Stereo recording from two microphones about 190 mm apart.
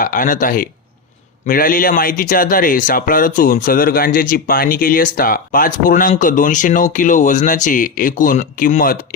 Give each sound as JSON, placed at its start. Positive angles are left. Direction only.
{"t": 0.0, "sound": "speech", "side_deg": 45}